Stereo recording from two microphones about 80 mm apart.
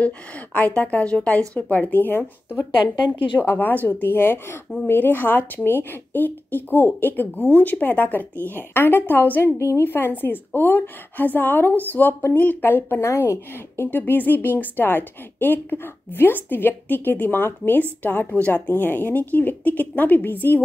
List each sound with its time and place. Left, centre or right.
0.0 s a woman's voice: centre